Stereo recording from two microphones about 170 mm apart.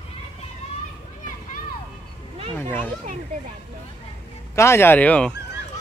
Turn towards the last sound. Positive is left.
turn(degrees=5)  # may be behind; listen again after turning